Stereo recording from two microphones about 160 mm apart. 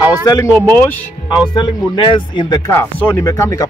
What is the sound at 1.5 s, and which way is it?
Speech, 30° left (ahead or behind).